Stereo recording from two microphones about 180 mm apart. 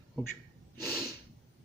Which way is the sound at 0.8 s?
15° left (ahead or behind).